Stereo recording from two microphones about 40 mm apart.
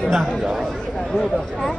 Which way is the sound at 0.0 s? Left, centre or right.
Centre.